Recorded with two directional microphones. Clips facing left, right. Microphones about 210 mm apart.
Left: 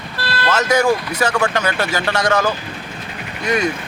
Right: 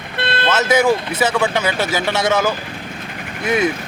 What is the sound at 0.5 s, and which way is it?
Speech, 5° right (ahead or behind).